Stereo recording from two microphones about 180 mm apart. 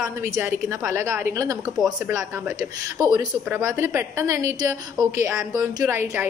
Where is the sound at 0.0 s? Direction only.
15° right (ahead or behind).